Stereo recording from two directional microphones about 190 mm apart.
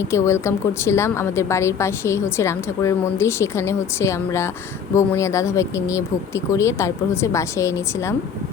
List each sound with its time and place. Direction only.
0.0 s a woman's voice: 15° left (ahead or behind)